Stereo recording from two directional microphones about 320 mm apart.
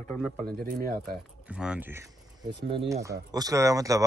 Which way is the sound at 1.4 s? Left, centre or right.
Centre.